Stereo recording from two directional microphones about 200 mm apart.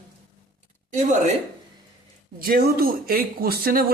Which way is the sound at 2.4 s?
50° right (ahead or behind).